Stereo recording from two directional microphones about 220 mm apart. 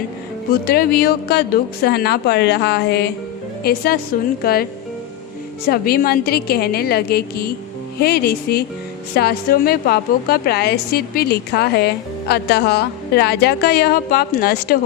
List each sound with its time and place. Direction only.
0.7 s a woman's voice: 45° left (ahead or behind)
5.6 s a woman's voice: 45° left (ahead or behind)